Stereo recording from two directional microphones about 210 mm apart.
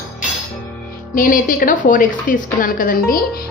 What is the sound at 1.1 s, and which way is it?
A woman's voice, 40° left (ahead or behind).